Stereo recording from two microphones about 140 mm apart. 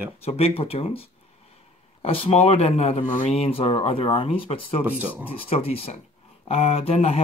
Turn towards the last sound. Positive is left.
turn(degrees=45)  # may be behind; listen again after turning